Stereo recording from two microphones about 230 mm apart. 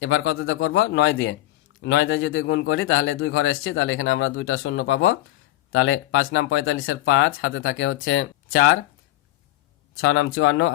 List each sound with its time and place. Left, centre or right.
0.0 s a man's voice: left
10.0 s a man's voice: left